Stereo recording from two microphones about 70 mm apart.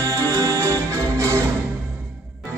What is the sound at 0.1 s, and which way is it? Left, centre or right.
Music, right.